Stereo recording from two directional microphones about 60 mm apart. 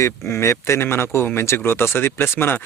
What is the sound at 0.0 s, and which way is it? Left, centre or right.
Speech, left.